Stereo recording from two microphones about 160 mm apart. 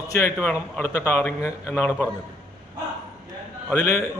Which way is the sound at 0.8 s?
10° left (ahead or behind).